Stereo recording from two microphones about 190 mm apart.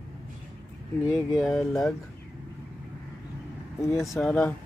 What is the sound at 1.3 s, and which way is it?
Speech, centre (ahead or behind).